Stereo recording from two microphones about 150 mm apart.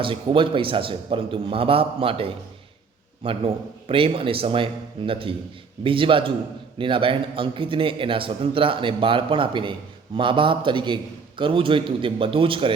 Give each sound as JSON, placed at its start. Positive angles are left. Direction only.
{"t": 0.0, "sound": "a man's voice", "side_deg": -35}